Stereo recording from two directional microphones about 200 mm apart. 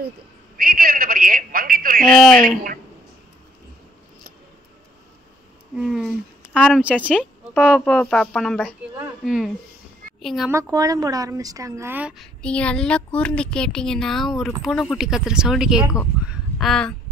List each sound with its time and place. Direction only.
0.6 s a woman's voice: 45° right (ahead or behind)
2.1 s a woman's voice: centre (ahead or behind)
5.8 s speech: centre (ahead or behind)
7.5 s a woman's voice: 5° left (ahead or behind)
10.5 s a woman's voice: 15° right (ahead or behind)
16.3 s a sound: centre (ahead or behind)